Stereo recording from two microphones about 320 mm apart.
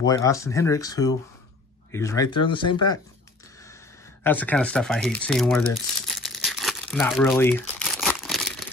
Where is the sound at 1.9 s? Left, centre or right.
Centre.